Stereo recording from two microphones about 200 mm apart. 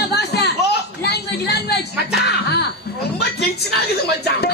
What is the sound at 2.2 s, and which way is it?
Speech, 55° left (ahead or behind).